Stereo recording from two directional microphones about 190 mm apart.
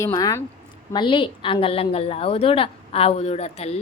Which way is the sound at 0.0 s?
20° left (ahead or behind).